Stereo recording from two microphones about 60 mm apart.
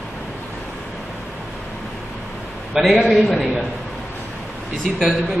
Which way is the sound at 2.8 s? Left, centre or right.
Centre.